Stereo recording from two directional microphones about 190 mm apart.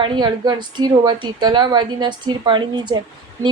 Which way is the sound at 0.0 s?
25° right (ahead or behind).